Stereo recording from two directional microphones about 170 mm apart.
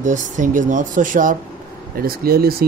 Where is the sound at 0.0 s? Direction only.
45° right (ahead or behind).